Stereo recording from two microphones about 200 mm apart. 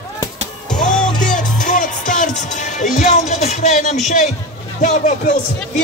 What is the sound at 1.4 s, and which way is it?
Music, 40° left (ahead or behind).